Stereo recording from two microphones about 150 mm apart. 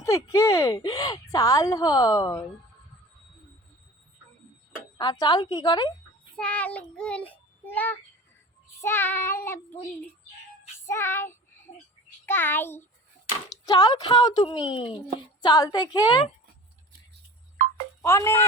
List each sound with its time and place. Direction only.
0.0 s speech: 20° left (ahead or behind)
4.9 s speech: 25° left (ahead or behind)
6.3 s child singing: 10° left (ahead or behind)
10.8 s child singing: 15° left (ahead or behind)
13.7 s a woman's voice: 25° left (ahead or behind)
14.8 s speech: 5° right (ahead or behind)
15.4 s speech: 25° left (ahead or behind)
17.6 s music: 65° right (ahead or behind)
18.0 s child singing: 20° left (ahead or behind)